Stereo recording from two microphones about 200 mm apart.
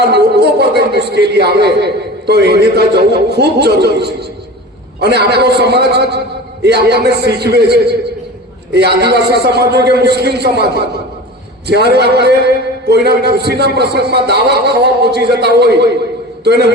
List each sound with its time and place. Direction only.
0.1 s a man's voice: 55° right (ahead or behind)